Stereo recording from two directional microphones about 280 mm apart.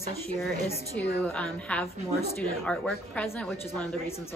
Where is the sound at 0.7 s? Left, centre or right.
Centre.